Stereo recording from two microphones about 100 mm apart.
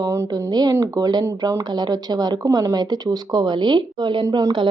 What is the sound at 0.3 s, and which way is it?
Speech, 45° right (ahead or behind).